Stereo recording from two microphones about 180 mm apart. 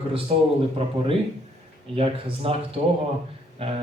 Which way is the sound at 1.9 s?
30° right (ahead or behind).